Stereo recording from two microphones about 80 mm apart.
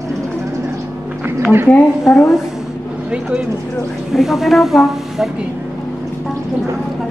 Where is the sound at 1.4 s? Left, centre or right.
Right.